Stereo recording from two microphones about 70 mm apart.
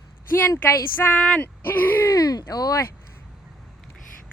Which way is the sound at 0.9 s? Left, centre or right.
Left.